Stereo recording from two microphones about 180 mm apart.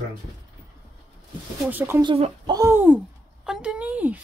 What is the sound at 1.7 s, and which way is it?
Speech, 15° right (ahead or behind).